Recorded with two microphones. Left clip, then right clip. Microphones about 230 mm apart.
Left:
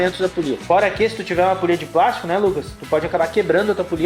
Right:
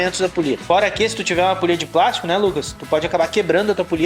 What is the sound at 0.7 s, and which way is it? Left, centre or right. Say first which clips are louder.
Speech: left 1 dB; right.